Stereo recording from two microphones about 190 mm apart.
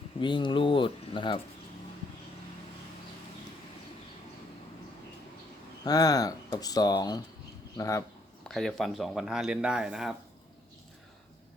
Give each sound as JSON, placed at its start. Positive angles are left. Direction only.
{"t": 0.2, "sound": "speech", "side_deg": 25}
{"t": 5.8, "sound": "speech", "side_deg": 20}
{"t": 8.4, "sound": "speech", "side_deg": 0}